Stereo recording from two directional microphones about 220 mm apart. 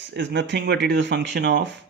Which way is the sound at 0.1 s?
55° right (ahead or behind).